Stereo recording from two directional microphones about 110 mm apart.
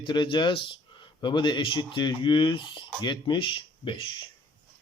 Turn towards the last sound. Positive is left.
turn(degrees=50)  # may be behind; listen again after turning